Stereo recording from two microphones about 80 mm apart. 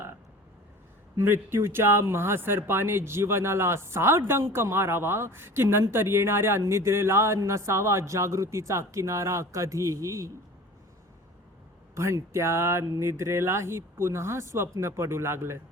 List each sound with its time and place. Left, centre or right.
1.1 s speech: right
11.9 s speech: right